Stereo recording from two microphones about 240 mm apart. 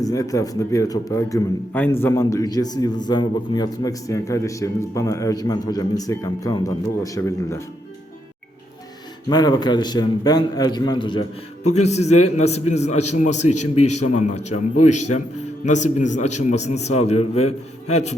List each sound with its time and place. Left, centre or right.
0.0 s a man's voice: centre
9.3 s a man's voice: centre
14.5 s a man's voice: left
15.6 s a man's voice: left